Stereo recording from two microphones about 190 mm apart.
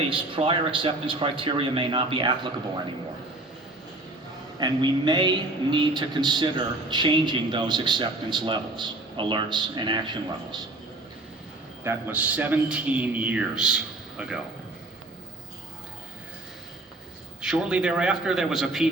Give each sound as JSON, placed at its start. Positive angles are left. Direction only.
{"t": 0.1, "sound": "a man's voice", "side_deg": -25}
{"t": 4.6, "sound": "a man's voice", "side_deg": -20}
{"t": 11.8, "sound": "a man's voice", "side_deg": -10}
{"t": 17.4, "sound": "a man's voice", "side_deg": -5}